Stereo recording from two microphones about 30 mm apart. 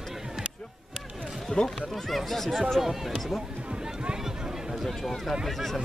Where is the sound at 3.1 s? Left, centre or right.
Centre.